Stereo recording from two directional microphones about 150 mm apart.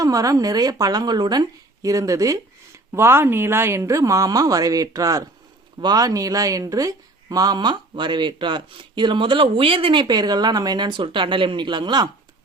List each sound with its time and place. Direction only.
0.0 s speech: 20° right (ahead or behind)